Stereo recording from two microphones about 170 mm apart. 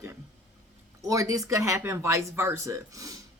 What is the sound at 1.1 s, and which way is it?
Speech, 20° right (ahead or behind).